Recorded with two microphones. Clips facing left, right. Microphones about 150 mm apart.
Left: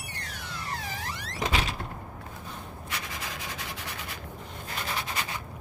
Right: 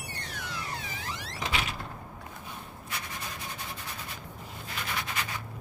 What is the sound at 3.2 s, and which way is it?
Rub, 90° left.